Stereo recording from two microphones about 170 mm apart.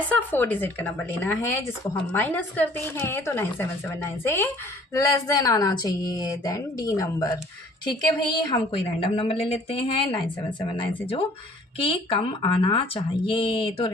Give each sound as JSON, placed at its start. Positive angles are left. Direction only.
{"t": 0.1, "sound": "a woman's voice", "side_deg": 10}